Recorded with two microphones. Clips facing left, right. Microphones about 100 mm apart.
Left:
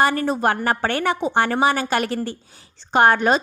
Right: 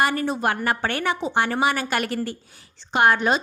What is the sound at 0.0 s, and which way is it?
A woman's voice, 40° left (ahead or behind).